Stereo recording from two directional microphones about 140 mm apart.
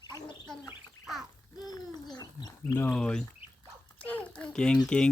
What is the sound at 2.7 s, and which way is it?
Speech, 10° left (ahead or behind).